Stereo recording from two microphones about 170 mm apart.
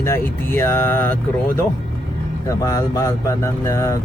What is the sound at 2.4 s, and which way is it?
Speech, 20° left (ahead or behind).